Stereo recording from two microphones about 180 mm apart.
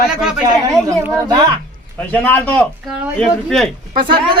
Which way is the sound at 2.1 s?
10° left (ahead or behind).